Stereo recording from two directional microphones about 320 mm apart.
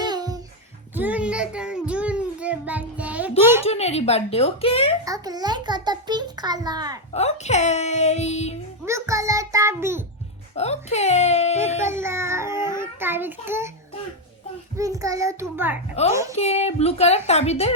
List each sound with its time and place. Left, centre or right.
0.0 s music: centre
0.9 s child singing: centre
3.6 s speech: centre
5.0 s a child's voice: centre
7.1 s speech: centre
8.8 s a child's voice: centre
10.5 s speech: centre
11.9 s a child's voice: centre
12.5 s a sound: centre
12.8 s a child's voice: centre
14.8 s a child's voice: centre
16.3 s speech: centre